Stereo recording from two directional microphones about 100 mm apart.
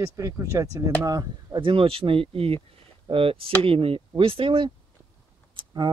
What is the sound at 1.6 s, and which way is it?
Speech, 60° right (ahead or behind).